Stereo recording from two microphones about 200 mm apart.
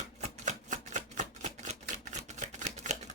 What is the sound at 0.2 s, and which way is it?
Typewriter, 35° right (ahead or behind).